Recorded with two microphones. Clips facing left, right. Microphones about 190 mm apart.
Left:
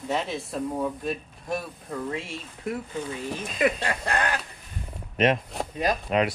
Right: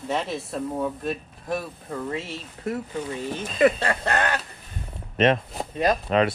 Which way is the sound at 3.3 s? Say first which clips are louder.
Right 5 dB; 30° right (ahead or behind).